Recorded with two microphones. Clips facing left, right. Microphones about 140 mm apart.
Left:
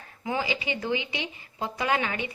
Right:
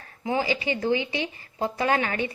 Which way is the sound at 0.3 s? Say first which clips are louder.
Right 4 dB; 35° right (ahead or behind).